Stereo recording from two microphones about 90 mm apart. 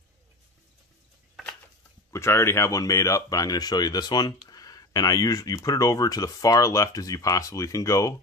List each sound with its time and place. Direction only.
2.1 s speech: 30° left (ahead or behind)